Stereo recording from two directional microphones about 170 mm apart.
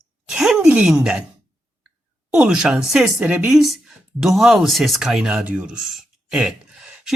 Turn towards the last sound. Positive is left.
turn(degrees=-5)  # may be behind; listen again after turning